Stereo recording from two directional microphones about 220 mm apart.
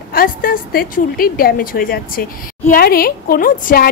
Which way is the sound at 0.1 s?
40° left (ahead or behind).